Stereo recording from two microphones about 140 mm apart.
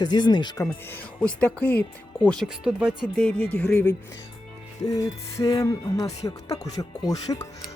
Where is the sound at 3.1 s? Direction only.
5° left (ahead or behind).